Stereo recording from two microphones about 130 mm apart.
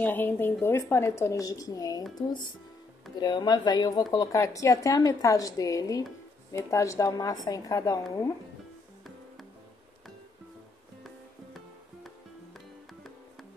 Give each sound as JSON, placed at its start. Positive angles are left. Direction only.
{"t": 0.0, "sound": "speech", "side_deg": 15}
{"t": 3.2, "sound": "speech", "side_deg": 30}